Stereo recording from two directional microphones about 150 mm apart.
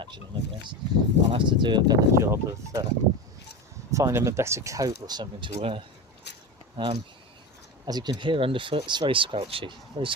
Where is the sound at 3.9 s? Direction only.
20° right (ahead or behind).